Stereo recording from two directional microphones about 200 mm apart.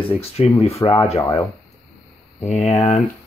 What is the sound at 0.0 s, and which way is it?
Speech, 30° left (ahead or behind).